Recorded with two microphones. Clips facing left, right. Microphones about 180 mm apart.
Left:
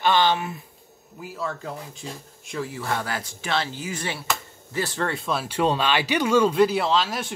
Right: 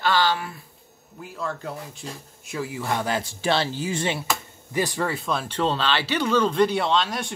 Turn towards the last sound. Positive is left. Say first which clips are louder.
# even
turn(degrees=5)  # may be behind; listen again after turning